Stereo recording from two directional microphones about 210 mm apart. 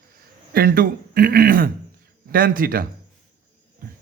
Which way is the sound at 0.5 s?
45° right (ahead or behind).